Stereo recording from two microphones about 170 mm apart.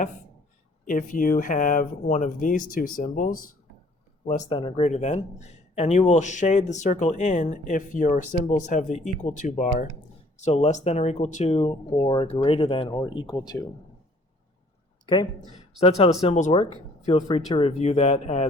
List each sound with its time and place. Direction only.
0.9 s speech: 50° left (ahead or behind)
4.4 s speech: 30° left (ahead or behind)
4.8 s speech: 45° left (ahead or behind); by 13.7 s 20° left (ahead or behind)
15.0 s speech: 25° left (ahead or behind)
15.8 s speech: 40° left (ahead or behind)
17.2 s speech: 30° left (ahead or behind)